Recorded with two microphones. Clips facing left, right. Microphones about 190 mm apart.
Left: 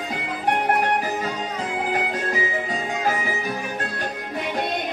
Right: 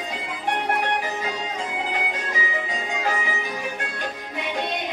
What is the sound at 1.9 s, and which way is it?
Music, 45° left (ahead or behind).